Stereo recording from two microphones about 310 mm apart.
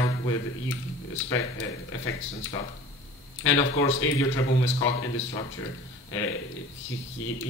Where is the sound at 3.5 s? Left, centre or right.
Centre.